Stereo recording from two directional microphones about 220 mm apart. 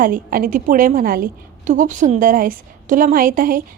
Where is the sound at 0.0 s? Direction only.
40° right (ahead or behind).